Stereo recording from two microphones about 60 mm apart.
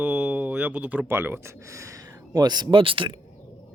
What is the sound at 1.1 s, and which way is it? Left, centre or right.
Speech, right.